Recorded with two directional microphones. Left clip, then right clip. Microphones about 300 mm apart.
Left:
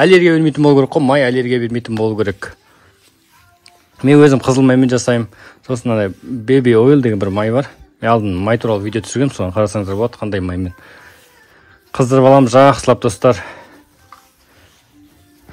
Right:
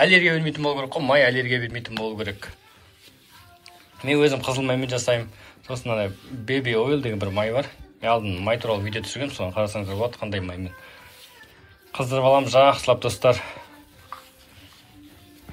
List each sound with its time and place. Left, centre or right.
0.0 s speech: left
3.6 s speech: left